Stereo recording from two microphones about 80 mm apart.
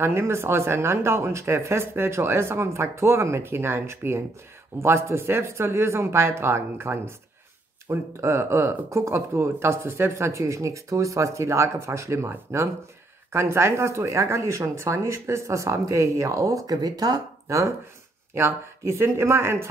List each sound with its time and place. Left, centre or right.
0.0 s speech: right